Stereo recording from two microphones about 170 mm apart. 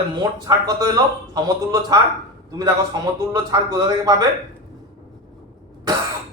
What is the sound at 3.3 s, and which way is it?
Speech, 20° right (ahead or behind).